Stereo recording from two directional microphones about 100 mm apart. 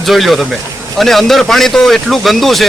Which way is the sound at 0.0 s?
Centre (ahead or behind).